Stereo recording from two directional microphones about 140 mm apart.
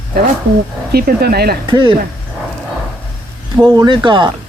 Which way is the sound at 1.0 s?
90° right.